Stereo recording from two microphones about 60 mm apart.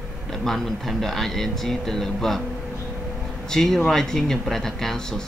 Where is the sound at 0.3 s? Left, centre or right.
Centre.